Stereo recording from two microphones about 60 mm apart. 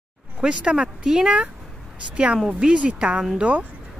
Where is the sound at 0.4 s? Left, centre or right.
Centre.